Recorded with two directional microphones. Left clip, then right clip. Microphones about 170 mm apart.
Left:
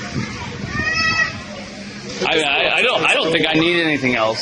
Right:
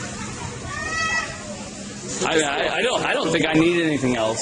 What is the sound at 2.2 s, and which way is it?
Speech, 35° right (ahead or behind).